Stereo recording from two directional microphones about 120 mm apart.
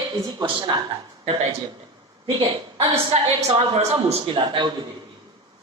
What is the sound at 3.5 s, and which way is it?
Speech, 55° right (ahead or behind).